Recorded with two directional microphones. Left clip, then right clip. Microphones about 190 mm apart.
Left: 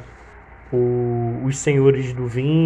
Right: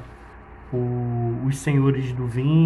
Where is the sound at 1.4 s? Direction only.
15° left (ahead or behind).